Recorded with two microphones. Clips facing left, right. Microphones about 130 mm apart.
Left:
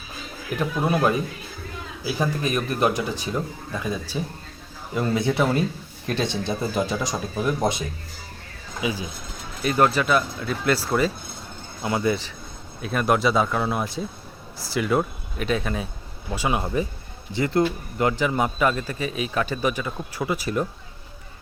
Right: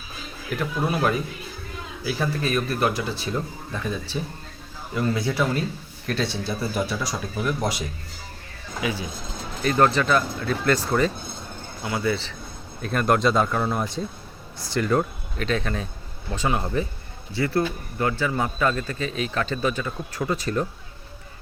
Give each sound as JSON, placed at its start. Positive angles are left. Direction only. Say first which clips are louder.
{"t": 2.0, "sound": "a man's voice", "louder": "left 1 dB", "side_deg": 15}
{"t": 4.9, "sound": "a man's voice", "louder": "left 2 dB", "side_deg": 20}
{"t": 11.8, "sound": "speech", "louder": "left 2 dB", "side_deg": 20}
{"t": 12.8, "sound": "a man's voice", "louder": "even", "side_deg": 5}